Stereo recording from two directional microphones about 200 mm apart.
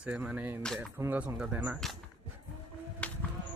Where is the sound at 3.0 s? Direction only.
5° left (ahead or behind).